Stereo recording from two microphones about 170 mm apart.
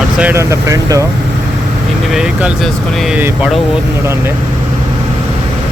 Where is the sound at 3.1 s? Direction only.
10° right (ahead or behind).